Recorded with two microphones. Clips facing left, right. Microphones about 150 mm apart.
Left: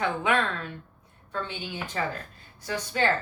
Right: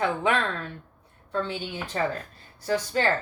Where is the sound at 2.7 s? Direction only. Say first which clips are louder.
Right 3 dB; 35° right (ahead or behind).